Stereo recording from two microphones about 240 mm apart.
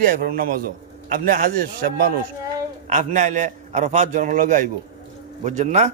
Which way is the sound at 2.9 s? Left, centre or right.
Right.